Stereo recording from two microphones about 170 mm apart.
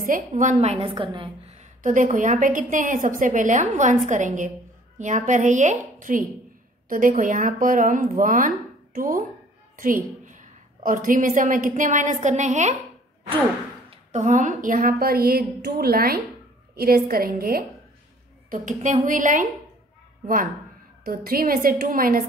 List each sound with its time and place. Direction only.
0.4 s a woman's voice: 45° right (ahead or behind)
13.8 s speech: 45° right (ahead or behind); by 17.6 s 60° right (ahead or behind)
18.5 s a woman's voice: 50° right (ahead or behind)
21.0 s speech: 60° right (ahead or behind)